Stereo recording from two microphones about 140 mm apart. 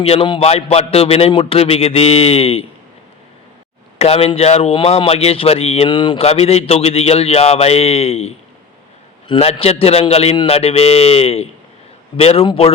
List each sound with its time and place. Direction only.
0.0 s speech: 45° left (ahead or behind)
3.9 s speech: 45° left (ahead or behind)